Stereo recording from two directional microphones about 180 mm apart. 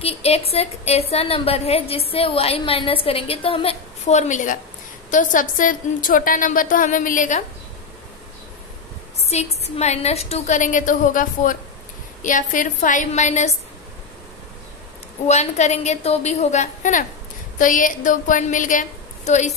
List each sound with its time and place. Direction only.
0.0 s a woman's voice: 35° left (ahead or behind)
9.2 s a woman's voice: 35° left (ahead or behind)
15.2 s a woman's voice: 40° left (ahead or behind)